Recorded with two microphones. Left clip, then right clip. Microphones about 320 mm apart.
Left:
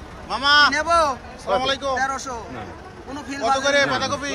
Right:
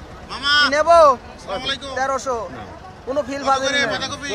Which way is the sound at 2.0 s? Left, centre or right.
Right.